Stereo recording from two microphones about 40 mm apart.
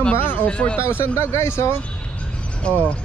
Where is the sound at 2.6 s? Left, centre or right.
Left.